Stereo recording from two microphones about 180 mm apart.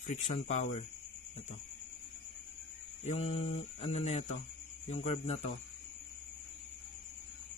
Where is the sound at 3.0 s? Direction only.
40° left (ahead or behind).